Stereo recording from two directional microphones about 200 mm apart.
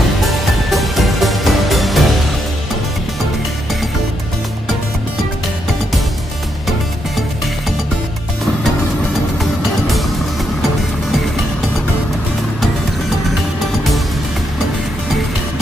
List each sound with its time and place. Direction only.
0.2 s music: centre (ahead or behind)
9.4 s music: centre (ahead or behind)